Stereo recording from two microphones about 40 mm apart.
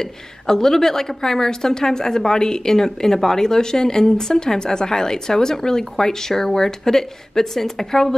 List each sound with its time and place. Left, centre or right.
0.0 s a woman's voice: centre